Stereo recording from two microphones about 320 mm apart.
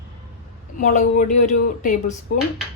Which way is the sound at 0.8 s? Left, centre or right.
Left.